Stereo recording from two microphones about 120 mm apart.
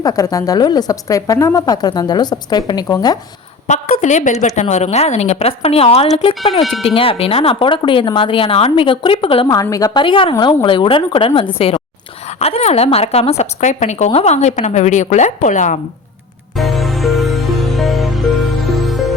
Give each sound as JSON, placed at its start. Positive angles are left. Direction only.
{"t": 0.0, "sound": "a woman's voice", "side_deg": 30}
{"t": 3.7, "sound": "a woman's voice", "side_deg": 85}
{"t": 4.7, "sound": "speech", "side_deg": 70}
{"t": 6.5, "sound": "music", "side_deg": 0}
{"t": 6.8, "sound": "speech", "side_deg": 50}
{"t": 9.5, "sound": "a woman's voice", "side_deg": 30}
{"t": 16.6, "sound": "music", "side_deg": 0}